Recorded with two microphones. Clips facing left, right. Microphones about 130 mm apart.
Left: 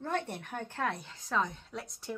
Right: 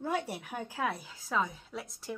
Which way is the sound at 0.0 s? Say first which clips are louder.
Right 1 dB; 10° right (ahead or behind).